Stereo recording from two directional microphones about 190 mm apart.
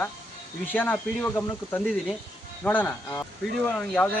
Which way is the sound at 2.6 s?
10° left (ahead or behind).